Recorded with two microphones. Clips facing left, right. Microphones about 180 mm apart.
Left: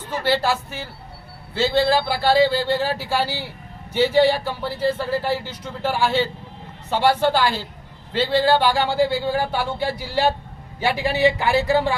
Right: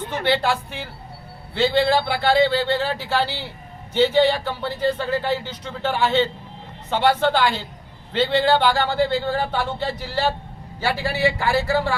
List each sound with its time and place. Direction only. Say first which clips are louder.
0.1 s speech: left 1 dB; 5° left (ahead or behind)